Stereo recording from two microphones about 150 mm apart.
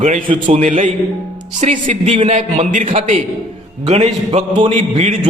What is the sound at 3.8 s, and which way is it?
A man's voice, 45° right (ahead or behind).